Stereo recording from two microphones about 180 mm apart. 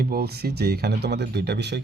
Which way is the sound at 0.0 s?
55° right (ahead or behind).